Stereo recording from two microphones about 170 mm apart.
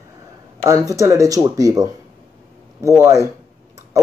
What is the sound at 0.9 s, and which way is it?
Speech, 20° right (ahead or behind).